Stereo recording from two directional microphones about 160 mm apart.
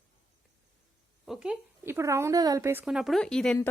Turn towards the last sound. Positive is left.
turn(degrees=5)  # may be behind; listen again after turning